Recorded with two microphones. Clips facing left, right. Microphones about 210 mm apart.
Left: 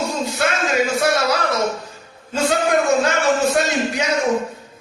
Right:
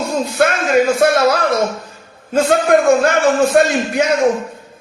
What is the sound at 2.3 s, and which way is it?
Speech, 55° right (ahead or behind).